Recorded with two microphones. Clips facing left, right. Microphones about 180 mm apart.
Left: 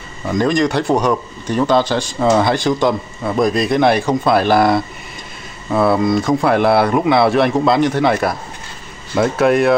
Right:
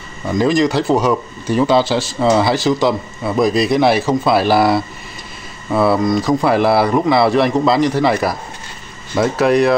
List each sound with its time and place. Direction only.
0.3 s speech: centre (ahead or behind)